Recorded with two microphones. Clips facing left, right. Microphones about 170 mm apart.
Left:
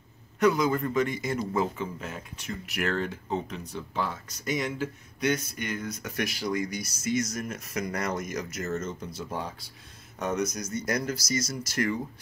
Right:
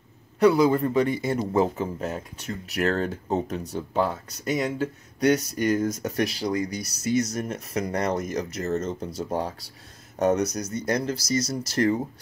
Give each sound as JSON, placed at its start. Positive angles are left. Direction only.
{"t": 0.4, "sound": "speech", "side_deg": -30}